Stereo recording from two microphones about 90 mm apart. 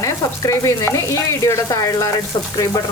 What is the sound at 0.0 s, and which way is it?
Speech, 40° left (ahead or behind).